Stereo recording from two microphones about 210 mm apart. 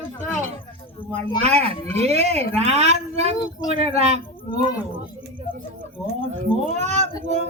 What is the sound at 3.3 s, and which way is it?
Speech, 20° left (ahead or behind).